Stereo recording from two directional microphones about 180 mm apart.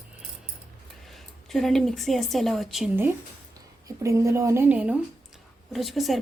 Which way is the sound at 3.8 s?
15° right (ahead or behind).